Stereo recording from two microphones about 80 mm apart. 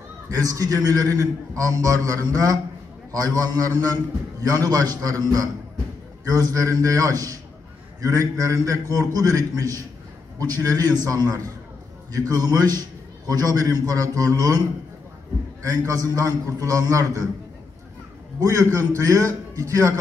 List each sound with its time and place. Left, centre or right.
0.4 s a man's voice: right
15.6 s a man's voice: right
18.4 s a man's voice: right